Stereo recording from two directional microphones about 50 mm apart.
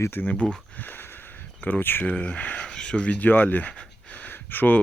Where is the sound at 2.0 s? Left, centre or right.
Left.